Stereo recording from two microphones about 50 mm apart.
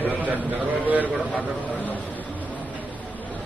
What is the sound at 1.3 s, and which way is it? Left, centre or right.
Speech, left.